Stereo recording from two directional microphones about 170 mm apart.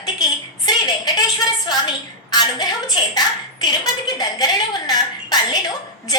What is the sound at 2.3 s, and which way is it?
Speech, 25° left (ahead or behind).